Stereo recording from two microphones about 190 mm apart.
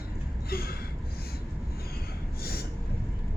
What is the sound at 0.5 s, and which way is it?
Gasp, 55° left (ahead or behind).